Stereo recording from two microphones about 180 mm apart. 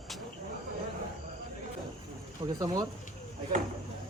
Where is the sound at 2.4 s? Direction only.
20° right (ahead or behind).